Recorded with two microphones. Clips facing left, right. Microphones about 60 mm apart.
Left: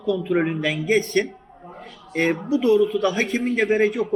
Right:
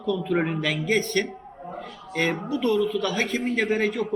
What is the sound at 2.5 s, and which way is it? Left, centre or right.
Speech, centre.